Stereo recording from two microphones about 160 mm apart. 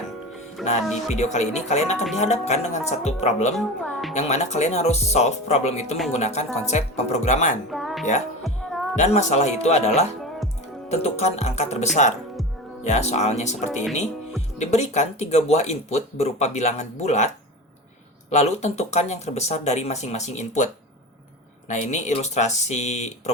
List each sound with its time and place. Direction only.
0.6 s music: centre (ahead or behind)
1.1 s speech: 45° left (ahead or behind)
3.5 s a woman's voice: centre (ahead or behind)
4.1 s speech: 45° left (ahead or behind)
7.7 s music: centre (ahead or behind)
9.0 s speech: 45° left (ahead or behind)
18.3 s speech: 45° left (ahead or behind)
21.7 s speech: 45° left (ahead or behind)